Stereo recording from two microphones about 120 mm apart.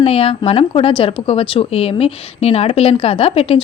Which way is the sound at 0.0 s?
55° left (ahead or behind).